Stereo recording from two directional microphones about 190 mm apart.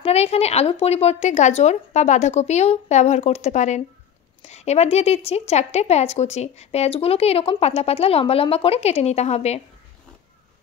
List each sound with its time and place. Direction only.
0.0 s a woman's voice: 35° left (ahead or behind)